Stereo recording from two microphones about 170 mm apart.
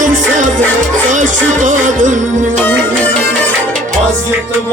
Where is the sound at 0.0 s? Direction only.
50° right (ahead or behind).